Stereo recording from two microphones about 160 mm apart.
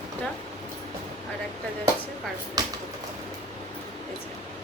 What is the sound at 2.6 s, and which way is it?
Speech, 25° right (ahead or behind).